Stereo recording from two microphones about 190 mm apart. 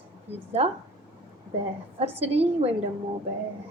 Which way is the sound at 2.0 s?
35° right (ahead or behind).